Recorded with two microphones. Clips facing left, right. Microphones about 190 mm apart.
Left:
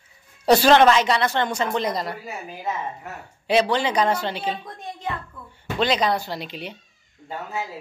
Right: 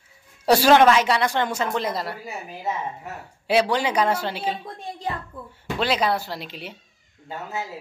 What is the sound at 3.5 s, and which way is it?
A woman's voice, 10° right (ahead or behind).